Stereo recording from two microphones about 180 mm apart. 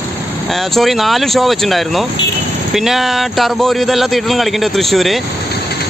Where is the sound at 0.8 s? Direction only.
Centre (ahead or behind).